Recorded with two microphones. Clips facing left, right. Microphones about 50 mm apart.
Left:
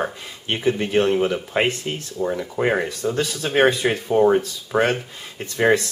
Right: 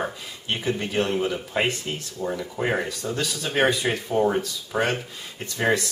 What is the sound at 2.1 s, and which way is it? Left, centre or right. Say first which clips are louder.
Speech: left 6 dB; centre.